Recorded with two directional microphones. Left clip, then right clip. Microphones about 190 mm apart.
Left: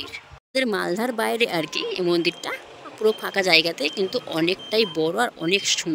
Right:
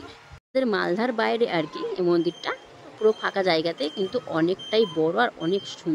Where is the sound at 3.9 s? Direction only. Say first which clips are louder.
Left 3 dB; 50° left (ahead or behind).